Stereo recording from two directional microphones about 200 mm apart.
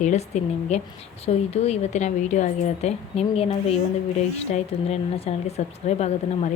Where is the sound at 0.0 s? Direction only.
35° left (ahead or behind).